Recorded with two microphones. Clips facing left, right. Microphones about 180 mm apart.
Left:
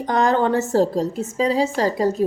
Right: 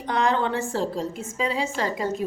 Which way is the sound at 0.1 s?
40° left (ahead or behind).